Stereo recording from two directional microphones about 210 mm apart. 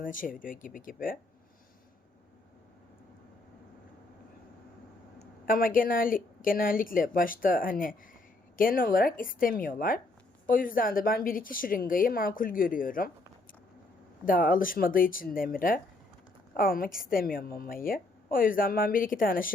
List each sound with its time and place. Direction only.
0.0 s a woman's voice: 40° left (ahead or behind)
5.2 s a woman's voice: 45° left (ahead or behind)
14.3 s speech: 40° left (ahead or behind)